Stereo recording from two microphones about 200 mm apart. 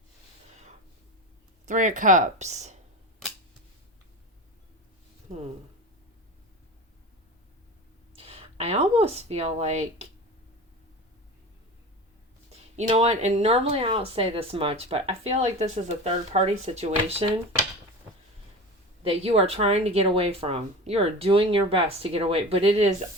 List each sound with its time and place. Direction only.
1.6 s speech: 40° right (ahead or behind)
8.1 s speech: 30° right (ahead or behind)
12.5 s speech: 30° right (ahead or behind)
19.0 s speech: 30° right (ahead or behind)